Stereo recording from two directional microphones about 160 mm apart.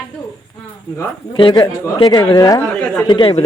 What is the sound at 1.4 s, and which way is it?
Speech, 30° left (ahead or behind).